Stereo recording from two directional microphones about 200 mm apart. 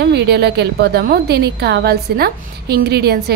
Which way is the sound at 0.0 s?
55° right (ahead or behind).